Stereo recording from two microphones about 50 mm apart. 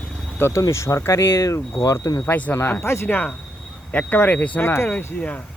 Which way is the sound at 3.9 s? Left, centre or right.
Left.